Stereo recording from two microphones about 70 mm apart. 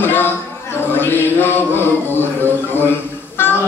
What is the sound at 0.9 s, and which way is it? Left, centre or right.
Music, left.